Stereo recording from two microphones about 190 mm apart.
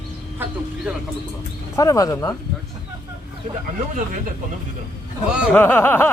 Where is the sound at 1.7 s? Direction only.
15° left (ahead or behind).